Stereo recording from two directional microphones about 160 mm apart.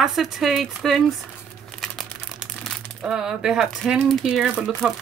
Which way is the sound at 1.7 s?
Centre (ahead or behind).